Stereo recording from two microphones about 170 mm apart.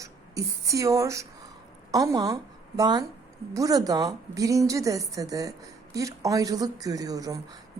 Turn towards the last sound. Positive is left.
turn(degrees=-20)  # may be behind; listen again after turning